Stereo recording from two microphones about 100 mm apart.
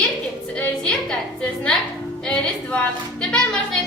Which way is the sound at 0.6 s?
10° left (ahead or behind).